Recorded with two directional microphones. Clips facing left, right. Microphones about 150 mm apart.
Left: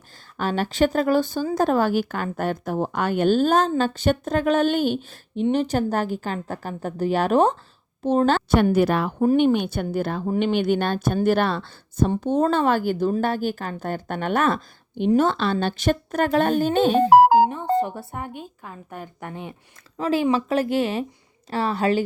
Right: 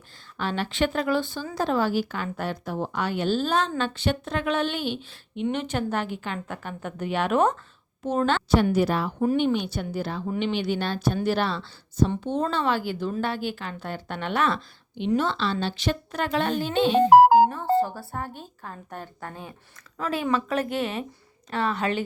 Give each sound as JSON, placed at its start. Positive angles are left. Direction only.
{"t": 0.3, "sound": "a woman's voice", "side_deg": 45}
{"t": 8.7, "sound": "a woman's voice", "side_deg": 55}
{"t": 17.5, "sound": "a woman's voice", "side_deg": 20}
{"t": 19.2, "sound": "speech", "side_deg": 20}